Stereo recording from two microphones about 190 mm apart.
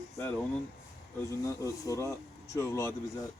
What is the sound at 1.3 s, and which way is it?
Speech, 15° left (ahead or behind).